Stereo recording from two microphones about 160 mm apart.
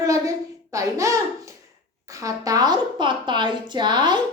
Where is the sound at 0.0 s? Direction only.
20° right (ahead or behind).